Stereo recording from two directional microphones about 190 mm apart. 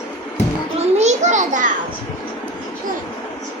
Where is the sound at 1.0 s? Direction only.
40° right (ahead or behind).